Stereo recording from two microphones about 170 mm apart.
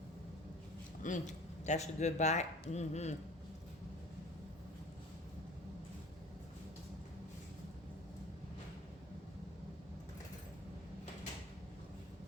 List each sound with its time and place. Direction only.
1.0 s speech: 45° left (ahead or behind)